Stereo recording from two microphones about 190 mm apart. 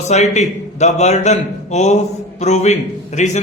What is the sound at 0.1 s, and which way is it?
A man's voice, 35° left (ahead or behind).